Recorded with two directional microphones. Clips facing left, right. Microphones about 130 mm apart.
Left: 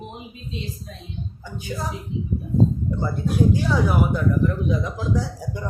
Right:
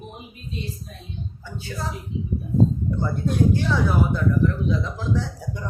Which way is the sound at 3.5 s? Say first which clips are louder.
Left 1 dB; 10° left (ahead or behind).